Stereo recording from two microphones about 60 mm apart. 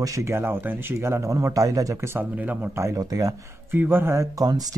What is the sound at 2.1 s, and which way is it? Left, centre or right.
Speech, right.